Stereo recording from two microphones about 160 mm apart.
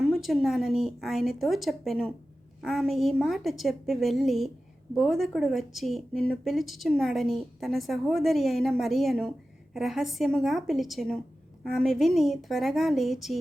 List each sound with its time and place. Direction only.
0.0 s a woman's voice: centre (ahead or behind)